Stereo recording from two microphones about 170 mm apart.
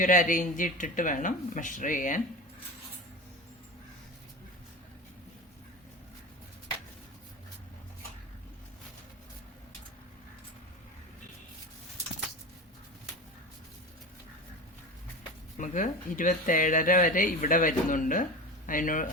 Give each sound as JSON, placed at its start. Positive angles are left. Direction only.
{"t": 0.0, "sound": "speech", "side_deg": 50}
{"t": 15.5, "sound": "speech", "side_deg": 50}